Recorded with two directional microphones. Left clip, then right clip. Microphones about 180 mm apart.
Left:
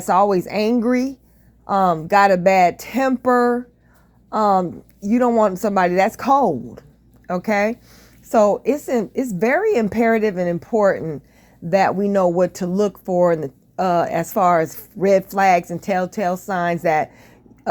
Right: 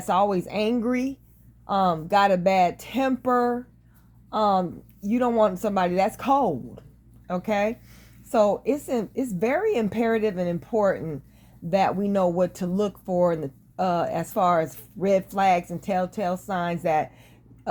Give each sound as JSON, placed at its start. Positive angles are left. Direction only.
{"t": 0.0, "sound": "a woman's voice", "side_deg": 30}